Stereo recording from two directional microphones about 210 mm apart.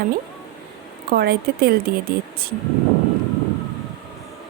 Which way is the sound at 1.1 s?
45° right (ahead or behind).